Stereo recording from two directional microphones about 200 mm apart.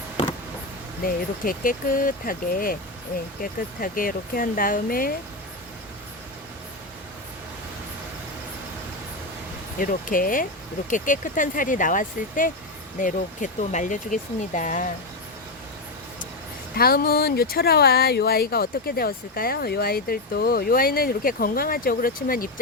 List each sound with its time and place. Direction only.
1.0 s speech: 45° left (ahead or behind)
9.7 s speech: 45° left (ahead or behind)
16.7 s speech: 50° left (ahead or behind)